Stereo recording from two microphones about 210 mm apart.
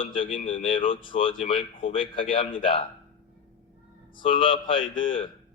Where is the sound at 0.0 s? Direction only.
25° left (ahead or behind).